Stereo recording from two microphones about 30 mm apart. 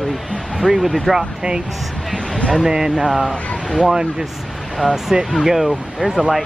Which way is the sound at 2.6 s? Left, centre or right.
Centre.